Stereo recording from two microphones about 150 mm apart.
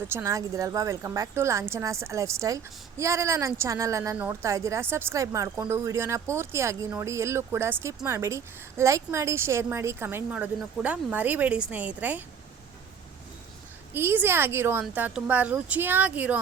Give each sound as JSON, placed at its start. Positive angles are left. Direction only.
{"t": 0.1, "sound": "a woman's voice", "side_deg": -20}
{"t": 13.9, "sound": "a woman's voice", "side_deg": -15}